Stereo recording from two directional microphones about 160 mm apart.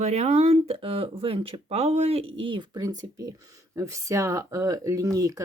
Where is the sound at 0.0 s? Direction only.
45° right (ahead or behind).